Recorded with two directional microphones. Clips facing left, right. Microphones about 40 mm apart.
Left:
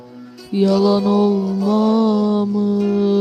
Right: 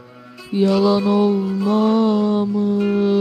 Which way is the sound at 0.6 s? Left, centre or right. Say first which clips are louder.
Left 1 dB; right.